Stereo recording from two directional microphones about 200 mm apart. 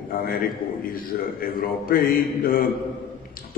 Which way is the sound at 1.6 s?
45° left (ahead or behind).